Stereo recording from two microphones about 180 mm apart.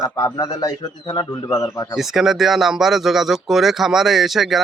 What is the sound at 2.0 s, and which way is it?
Speech, centre (ahead or behind).